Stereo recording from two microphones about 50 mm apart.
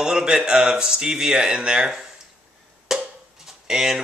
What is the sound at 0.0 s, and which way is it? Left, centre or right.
Speech, centre.